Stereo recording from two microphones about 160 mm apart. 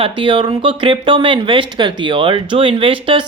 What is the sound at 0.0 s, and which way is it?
Speech, 30° right (ahead or behind).